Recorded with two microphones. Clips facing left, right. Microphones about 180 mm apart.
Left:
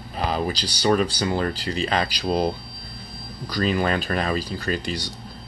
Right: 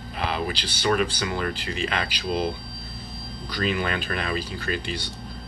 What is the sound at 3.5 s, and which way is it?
Speech, 40° left (ahead or behind).